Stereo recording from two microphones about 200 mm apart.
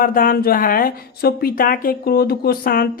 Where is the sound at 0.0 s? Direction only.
45° left (ahead or behind).